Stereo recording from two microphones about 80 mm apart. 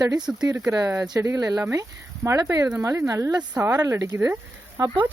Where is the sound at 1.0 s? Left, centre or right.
Right.